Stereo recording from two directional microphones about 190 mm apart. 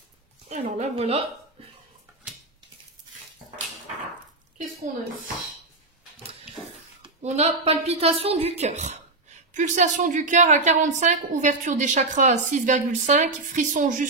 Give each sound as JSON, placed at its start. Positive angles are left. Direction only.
{"t": 0.5, "sound": "speech", "side_deg": -40}
{"t": 1.6, "sound": "a sound", "side_deg": -30}
{"t": 7.2, "sound": "speech", "side_deg": -35}